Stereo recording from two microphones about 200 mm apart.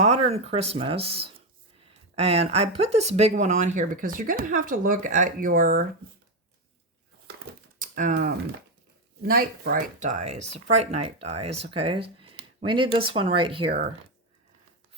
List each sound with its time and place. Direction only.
0.0 s speech: 30° right (ahead or behind)
7.8 s typewriter: 40° right (ahead or behind)
9.2 s speech: 50° right (ahead or behind); by 13.7 s 25° right (ahead or behind)